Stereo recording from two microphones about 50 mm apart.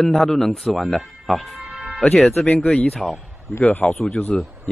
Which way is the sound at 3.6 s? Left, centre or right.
Left.